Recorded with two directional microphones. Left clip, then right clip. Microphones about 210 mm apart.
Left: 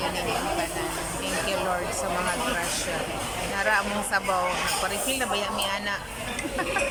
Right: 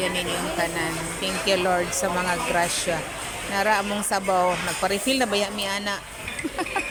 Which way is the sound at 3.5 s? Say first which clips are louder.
Right 3 dB; 20° right (ahead or behind).